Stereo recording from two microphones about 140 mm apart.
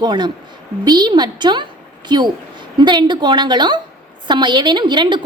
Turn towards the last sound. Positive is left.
turn(degrees=-35)  # may be behind; listen again after turning